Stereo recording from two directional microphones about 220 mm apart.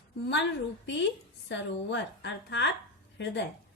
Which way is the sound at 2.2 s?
55° left (ahead or behind).